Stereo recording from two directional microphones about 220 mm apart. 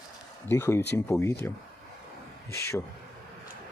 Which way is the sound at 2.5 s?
10° left (ahead or behind).